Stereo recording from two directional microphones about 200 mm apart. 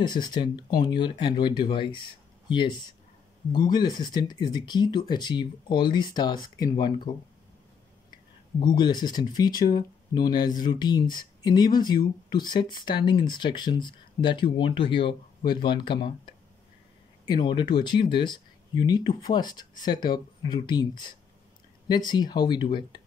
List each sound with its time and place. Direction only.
0.0 s speech: 20° left (ahead or behind)
3.5 s speech: 20° left (ahead or behind)
9.5 s speech: 45° left (ahead or behind)
9.8 s speech: 20° left (ahead or behind)
17.3 s speech: 25° left (ahead or behind)